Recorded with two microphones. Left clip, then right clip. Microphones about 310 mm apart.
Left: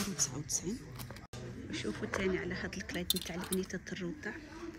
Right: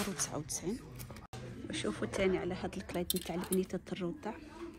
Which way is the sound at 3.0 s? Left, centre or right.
Centre.